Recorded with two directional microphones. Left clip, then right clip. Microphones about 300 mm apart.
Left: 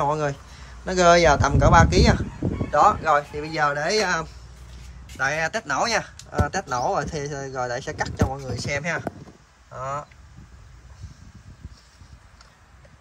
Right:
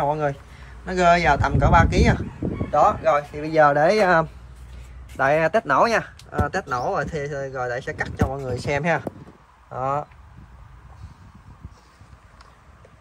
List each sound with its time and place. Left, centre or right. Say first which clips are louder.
0.0 s a man's voice: right 1 dB; centre
8.5 s speech: right 4 dB; centre